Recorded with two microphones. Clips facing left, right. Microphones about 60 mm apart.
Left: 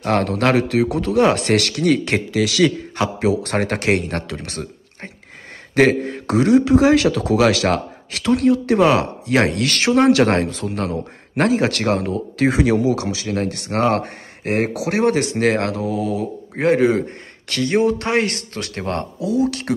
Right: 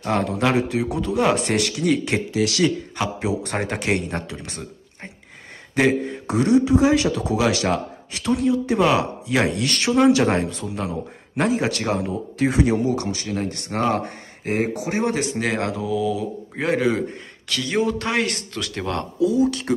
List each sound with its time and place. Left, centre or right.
0.0 s speech: left
3.5 s speech: left
6.2 s speech: left
8.9 s speech: left
9.5 s a man's voice: left
13.3 s speech: left
14.7 s speech: left